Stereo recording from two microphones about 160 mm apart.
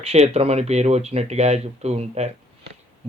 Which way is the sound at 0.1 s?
40° right (ahead or behind).